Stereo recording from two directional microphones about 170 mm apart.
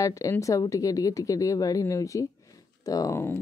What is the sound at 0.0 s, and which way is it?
Speech, 20° left (ahead or behind).